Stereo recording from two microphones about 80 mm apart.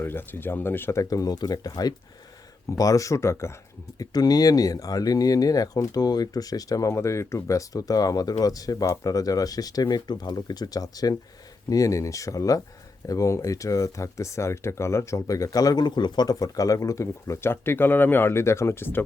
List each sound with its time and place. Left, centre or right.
0.0 s speech: left
1.1 s speech: left
2.6 s speech: left
3.9 s speech: left
15.8 s speech: left